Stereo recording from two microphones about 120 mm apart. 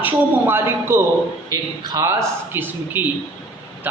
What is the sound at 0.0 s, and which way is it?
A man's voice, 15° right (ahead or behind).